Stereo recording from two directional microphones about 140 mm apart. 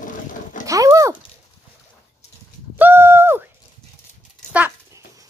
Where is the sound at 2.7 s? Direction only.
15° right (ahead or behind).